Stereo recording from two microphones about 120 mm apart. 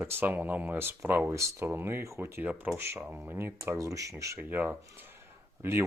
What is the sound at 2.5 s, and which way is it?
Speech, 10° right (ahead or behind).